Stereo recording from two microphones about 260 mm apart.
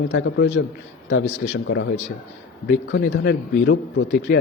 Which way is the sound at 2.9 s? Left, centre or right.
Left.